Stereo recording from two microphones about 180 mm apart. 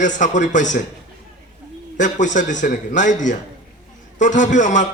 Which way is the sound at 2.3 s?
45° left (ahead or behind).